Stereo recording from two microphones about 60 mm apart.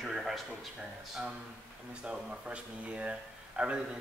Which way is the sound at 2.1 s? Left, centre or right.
Centre.